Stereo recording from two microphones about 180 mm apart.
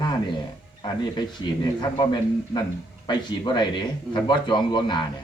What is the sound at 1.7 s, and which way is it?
Speech, 25° left (ahead or behind).